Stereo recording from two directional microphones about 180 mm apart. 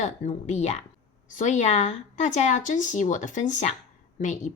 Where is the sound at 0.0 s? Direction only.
40° left (ahead or behind).